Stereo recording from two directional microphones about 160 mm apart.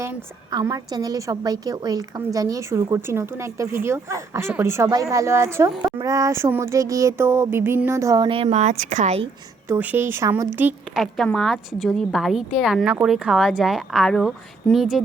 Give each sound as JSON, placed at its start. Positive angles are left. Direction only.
{"t": 0.5, "sound": "a woman's voice", "side_deg": -25}
{"t": 5.8, "sound": "a sound", "side_deg": -20}
{"t": 8.3, "sound": "speech", "side_deg": -35}
{"t": 9.6, "sound": "a woman's voice", "side_deg": -10}